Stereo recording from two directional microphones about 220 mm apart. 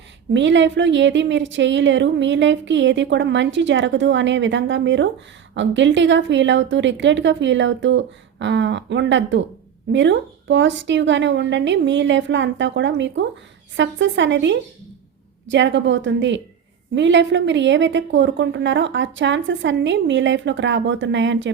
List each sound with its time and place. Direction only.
0.3 s speech: 55° right (ahead or behind)